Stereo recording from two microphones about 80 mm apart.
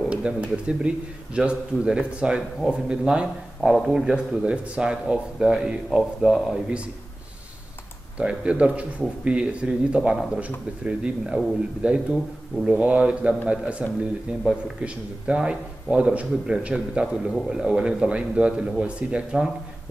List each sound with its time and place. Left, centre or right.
0.0 s speech: centre
8.2 s a man's voice: centre